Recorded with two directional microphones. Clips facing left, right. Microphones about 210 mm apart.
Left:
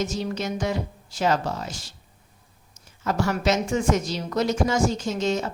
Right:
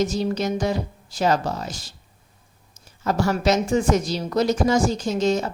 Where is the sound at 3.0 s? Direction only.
35° right (ahead or behind).